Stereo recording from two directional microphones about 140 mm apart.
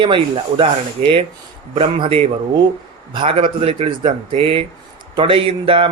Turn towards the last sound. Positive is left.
turn(degrees=-40)  # may be behind; listen again after turning